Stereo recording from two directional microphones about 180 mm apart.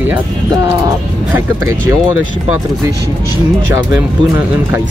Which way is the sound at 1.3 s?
15° right (ahead or behind).